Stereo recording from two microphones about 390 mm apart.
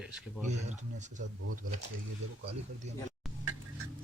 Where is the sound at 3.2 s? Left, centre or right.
Centre.